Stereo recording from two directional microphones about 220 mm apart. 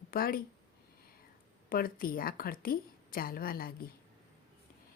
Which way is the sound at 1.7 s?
40° left (ahead or behind).